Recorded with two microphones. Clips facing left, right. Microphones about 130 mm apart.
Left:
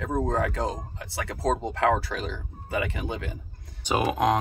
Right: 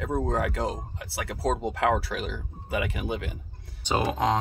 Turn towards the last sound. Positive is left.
turn(degrees=10)  # may be behind; listen again after turning